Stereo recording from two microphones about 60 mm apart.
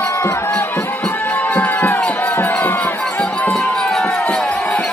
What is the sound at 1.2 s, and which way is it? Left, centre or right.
Music, left.